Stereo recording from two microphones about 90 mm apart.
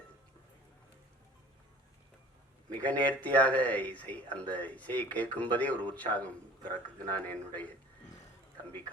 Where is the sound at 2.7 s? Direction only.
15° left (ahead or behind).